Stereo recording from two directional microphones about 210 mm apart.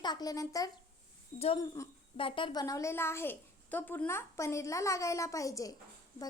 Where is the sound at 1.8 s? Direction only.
15° left (ahead or behind).